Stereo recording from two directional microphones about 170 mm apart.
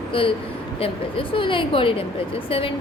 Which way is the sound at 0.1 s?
30° left (ahead or behind).